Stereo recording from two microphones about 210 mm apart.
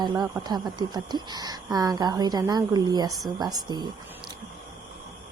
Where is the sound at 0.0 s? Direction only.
20° right (ahead or behind).